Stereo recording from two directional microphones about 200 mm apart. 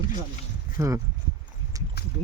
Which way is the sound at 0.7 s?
15° right (ahead or behind).